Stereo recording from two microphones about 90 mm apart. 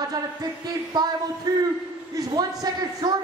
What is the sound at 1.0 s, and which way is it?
Speech, 50° right (ahead or behind).